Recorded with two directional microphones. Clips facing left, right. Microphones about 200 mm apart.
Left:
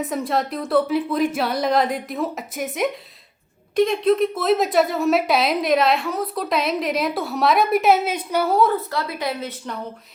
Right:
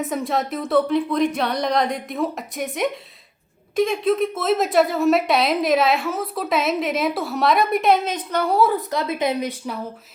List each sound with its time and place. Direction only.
0.0 s a woman's voice: centre (ahead or behind)
8.7 s speech: 20° right (ahead or behind)